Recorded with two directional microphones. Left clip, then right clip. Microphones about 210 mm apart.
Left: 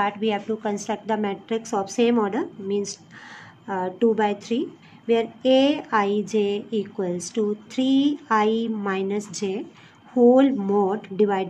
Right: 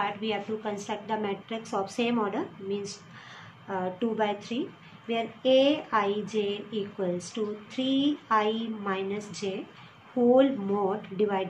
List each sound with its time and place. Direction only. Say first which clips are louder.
0.0 s a woman's voice: left 6 dB; 60° left (ahead or behind)